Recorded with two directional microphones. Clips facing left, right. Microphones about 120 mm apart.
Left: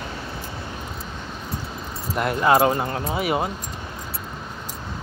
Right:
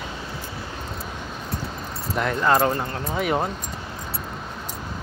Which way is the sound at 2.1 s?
10° left (ahead or behind).